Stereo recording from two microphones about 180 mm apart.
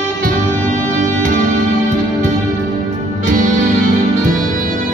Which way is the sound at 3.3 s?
45° right (ahead or behind).